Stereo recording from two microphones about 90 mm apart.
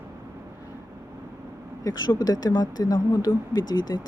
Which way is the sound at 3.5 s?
55° left (ahead or behind).